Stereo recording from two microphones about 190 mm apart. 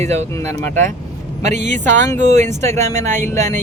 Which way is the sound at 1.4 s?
40° right (ahead or behind).